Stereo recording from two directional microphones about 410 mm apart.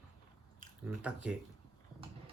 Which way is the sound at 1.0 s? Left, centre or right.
Centre.